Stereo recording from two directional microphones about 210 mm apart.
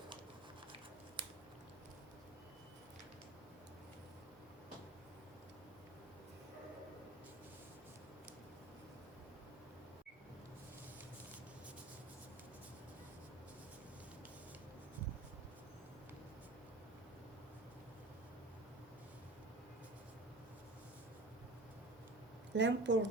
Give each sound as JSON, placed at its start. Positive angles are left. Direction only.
{"t": 1.2, "sound": "scissors", "side_deg": -25}
{"t": 22.5, "sound": "a woman's voice", "side_deg": -60}